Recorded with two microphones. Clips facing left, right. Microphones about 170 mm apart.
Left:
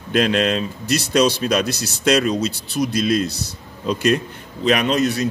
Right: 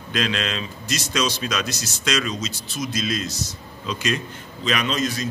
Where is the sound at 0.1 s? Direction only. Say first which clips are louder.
Left 8 dB; 55° left (ahead or behind).